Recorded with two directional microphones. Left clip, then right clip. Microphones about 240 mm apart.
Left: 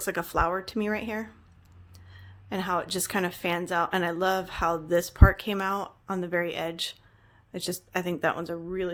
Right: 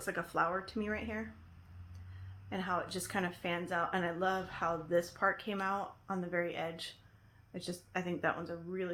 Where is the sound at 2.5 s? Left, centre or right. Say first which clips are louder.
Left 8 dB; left.